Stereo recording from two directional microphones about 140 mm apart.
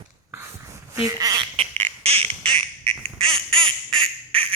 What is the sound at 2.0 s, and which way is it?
Quack, 45° right (ahead or behind).